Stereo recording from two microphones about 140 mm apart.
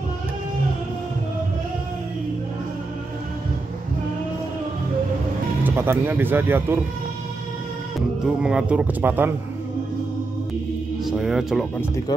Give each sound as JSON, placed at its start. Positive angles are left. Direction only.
{"t": 5.6, "sound": "speech", "side_deg": -15}
{"t": 8.4, "sound": "speech", "side_deg": -5}
{"t": 11.1, "sound": "speech", "side_deg": -5}